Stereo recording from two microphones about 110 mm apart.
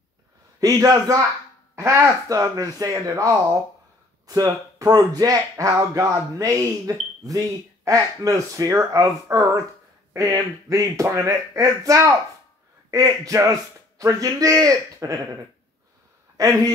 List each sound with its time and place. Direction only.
0.6 s speech: 30° right (ahead or behind)
16.3 s speech: 35° right (ahead or behind)